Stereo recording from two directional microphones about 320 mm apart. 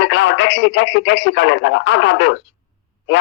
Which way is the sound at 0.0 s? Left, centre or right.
Left.